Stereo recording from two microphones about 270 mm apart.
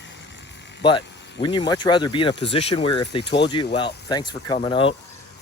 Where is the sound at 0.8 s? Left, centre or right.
Centre.